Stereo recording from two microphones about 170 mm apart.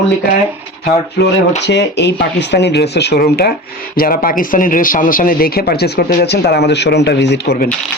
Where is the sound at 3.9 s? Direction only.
55° left (ahead or behind); by 7.7 s 80° left.